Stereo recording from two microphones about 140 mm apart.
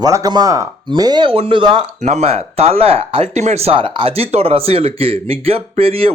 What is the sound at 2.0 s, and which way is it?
Speech, 55° right (ahead or behind).